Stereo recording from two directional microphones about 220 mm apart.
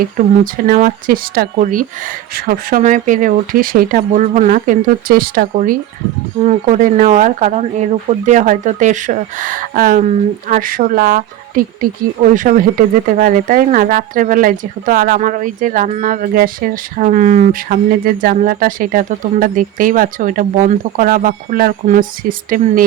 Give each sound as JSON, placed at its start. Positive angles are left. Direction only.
{"t": 0.7, "sound": "speech", "side_deg": -35}